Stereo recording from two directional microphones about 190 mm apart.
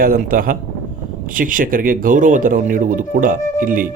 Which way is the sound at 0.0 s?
50° right (ahead or behind).